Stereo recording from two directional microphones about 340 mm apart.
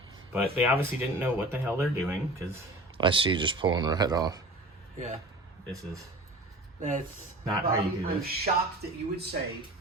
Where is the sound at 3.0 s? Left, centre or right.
Centre.